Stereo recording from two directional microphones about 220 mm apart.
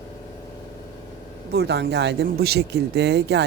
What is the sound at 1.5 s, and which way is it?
A woman's voice, 50° right (ahead or behind).